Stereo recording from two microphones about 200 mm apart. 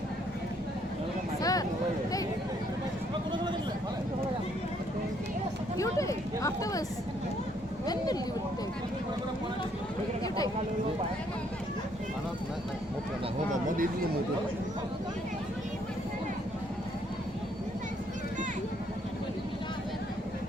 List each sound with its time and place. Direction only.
1.4 s a sound: 15° left (ahead or behind)
5.7 s speech: 15° left (ahead or behind)
7.9 s speech: 20° left (ahead or behind)